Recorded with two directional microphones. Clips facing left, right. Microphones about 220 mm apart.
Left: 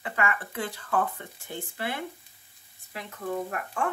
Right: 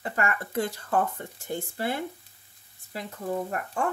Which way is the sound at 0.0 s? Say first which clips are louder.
Right 1 dB; 40° right (ahead or behind).